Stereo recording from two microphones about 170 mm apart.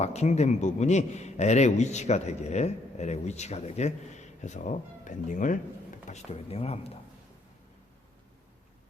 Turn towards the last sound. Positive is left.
turn(degrees=35)  # may be behind; listen again after turning